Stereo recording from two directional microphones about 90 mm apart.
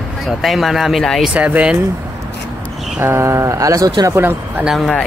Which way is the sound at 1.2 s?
15° right (ahead or behind).